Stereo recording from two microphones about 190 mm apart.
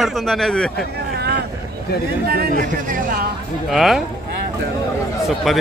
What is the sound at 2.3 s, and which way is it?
Speech, 55° right (ahead or behind).